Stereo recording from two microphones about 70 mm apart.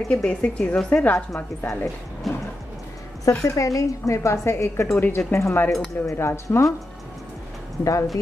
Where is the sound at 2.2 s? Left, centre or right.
Centre.